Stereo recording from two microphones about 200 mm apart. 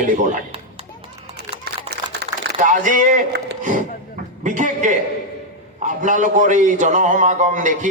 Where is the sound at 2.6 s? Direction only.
40° right (ahead or behind).